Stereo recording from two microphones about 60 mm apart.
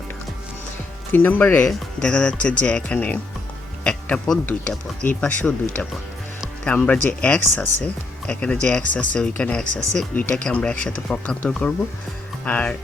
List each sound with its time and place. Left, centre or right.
1.1 s speech: left
1.6 s speech: centre; by 4.3 s left
5.0 s speech: centre